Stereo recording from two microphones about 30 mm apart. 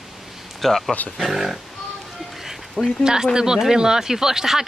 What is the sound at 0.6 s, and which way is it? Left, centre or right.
Speech, centre.